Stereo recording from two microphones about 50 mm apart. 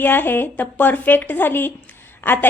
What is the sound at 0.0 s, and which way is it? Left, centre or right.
A woman's voice, left.